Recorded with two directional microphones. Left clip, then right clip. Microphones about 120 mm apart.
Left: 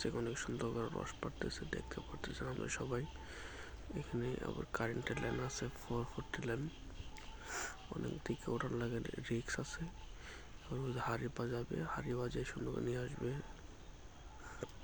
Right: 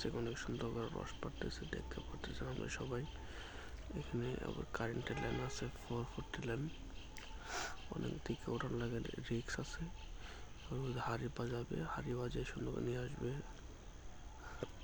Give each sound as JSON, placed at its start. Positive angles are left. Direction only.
{"t": 0.3, "sound": "speech", "side_deg": 25}
{"t": 7.4, "sound": "speech", "side_deg": 0}
{"t": 8.0, "sound": "speech", "side_deg": 15}